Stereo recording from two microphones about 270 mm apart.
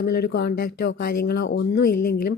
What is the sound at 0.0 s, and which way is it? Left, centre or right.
Speech, left.